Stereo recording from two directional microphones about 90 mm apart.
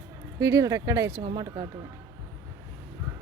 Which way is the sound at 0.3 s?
40° right (ahead or behind).